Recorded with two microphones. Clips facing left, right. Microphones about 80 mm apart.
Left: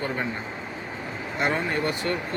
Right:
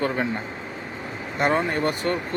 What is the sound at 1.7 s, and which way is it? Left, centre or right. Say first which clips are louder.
Speech: right 2 dB; right.